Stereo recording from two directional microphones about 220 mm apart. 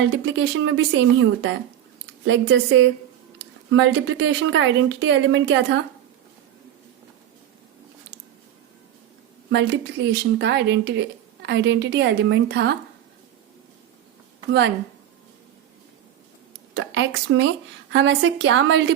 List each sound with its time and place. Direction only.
0.0 s speech: 55° right (ahead or behind)
9.5 s speech: 50° right (ahead or behind)
16.7 s speech: 60° right (ahead or behind)